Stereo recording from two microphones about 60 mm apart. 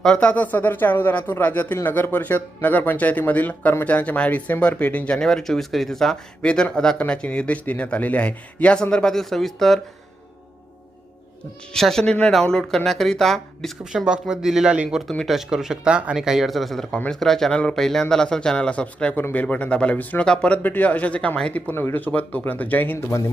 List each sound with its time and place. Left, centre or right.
0.2 s a man's voice: left
5.2 s a man's voice: centre
6.4 s a man's voice: centre
11.7 s a man's voice: centre
13.9 s a man's voice: centre
20.6 s a man's voice: left
21.5 s a man's voice: left
23.0 s speech: left